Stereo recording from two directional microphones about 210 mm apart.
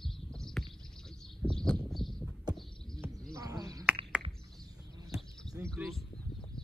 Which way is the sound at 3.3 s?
15° right (ahead or behind).